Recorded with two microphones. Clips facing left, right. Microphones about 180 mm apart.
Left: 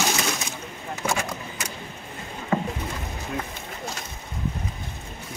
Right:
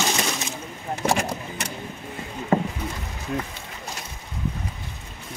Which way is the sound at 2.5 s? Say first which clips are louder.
Right 3 dB; 30° right (ahead or behind).